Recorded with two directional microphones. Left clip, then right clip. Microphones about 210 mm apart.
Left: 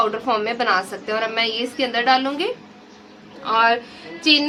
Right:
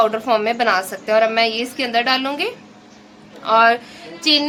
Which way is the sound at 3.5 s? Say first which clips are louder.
Right 4 dB; 50° right (ahead or behind).